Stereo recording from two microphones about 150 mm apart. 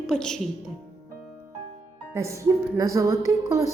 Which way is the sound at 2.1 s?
20° right (ahead or behind).